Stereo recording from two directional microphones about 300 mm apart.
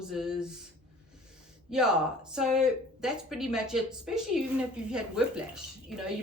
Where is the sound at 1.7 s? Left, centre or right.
Centre.